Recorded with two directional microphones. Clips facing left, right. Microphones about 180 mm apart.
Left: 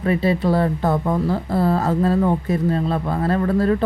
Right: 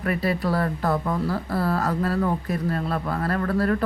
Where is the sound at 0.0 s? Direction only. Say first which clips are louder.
Left 5 dB; 25° left (ahead or behind).